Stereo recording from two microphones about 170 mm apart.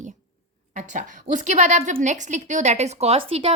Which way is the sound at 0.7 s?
45° right (ahead or behind).